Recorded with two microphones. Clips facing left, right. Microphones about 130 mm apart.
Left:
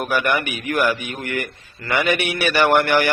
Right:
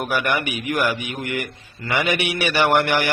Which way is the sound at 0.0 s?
15° right (ahead or behind).